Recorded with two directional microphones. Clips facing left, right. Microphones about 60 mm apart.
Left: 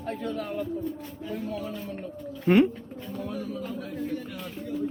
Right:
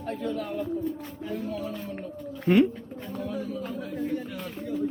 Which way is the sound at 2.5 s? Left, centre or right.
Left.